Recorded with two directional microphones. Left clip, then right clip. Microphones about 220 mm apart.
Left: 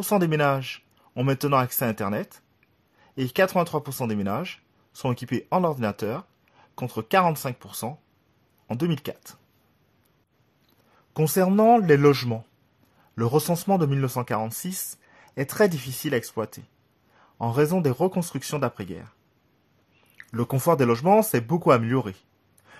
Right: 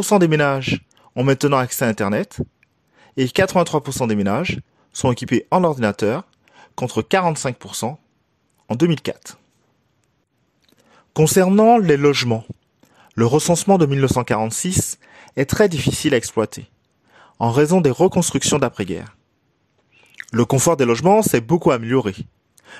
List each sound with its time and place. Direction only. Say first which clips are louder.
0.0 s speech: right 7 dB; 30° right (ahead or behind)
10.9 s a man's voice: right 9 dB; 35° right (ahead or behind)